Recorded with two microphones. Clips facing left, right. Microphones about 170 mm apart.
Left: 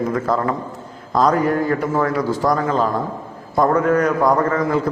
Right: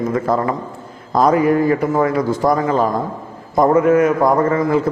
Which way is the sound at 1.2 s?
10° right (ahead or behind).